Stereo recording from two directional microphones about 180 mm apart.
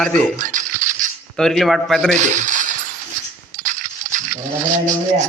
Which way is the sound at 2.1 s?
45° right (ahead or behind).